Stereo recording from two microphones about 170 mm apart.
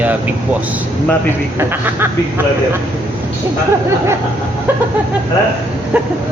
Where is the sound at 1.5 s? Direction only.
15° right (ahead or behind).